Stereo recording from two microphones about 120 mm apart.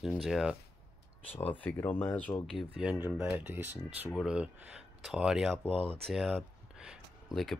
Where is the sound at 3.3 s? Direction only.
15° right (ahead or behind).